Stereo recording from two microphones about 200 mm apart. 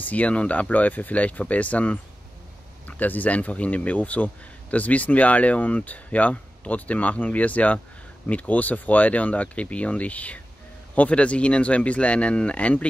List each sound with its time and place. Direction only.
0.0 s speech: 10° left (ahead or behind)